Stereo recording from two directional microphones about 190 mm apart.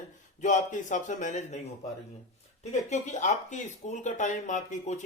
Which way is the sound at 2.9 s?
40° left (ahead or behind).